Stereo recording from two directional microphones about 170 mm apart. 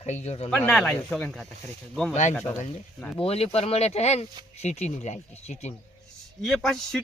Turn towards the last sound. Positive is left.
turn(degrees=5)  # may be behind; listen again after turning